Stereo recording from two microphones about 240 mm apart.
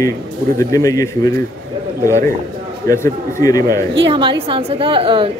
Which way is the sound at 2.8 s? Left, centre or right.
Centre.